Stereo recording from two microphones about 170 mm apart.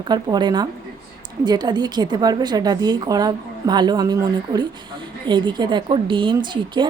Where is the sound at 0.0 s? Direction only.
25° right (ahead or behind).